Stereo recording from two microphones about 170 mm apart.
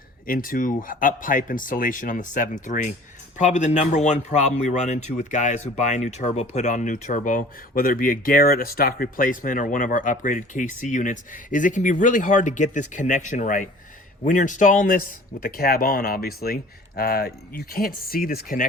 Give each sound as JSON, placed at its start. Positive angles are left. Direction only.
{"t": 0.3, "sound": "a man's voice", "side_deg": 55}